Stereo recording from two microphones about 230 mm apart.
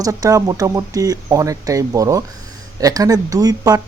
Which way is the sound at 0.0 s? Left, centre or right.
Centre.